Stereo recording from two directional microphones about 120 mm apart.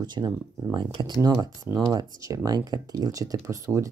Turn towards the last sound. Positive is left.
turn(degrees=-25)  # may be behind; listen again after turning